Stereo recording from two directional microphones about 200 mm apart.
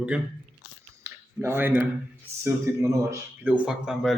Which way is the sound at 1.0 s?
15° right (ahead or behind).